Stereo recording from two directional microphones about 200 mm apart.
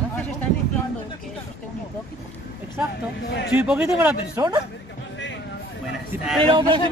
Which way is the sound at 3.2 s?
55° left (ahead or behind).